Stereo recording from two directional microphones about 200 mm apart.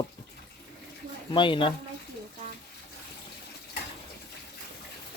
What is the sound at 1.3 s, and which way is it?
Speech, 25° left (ahead or behind).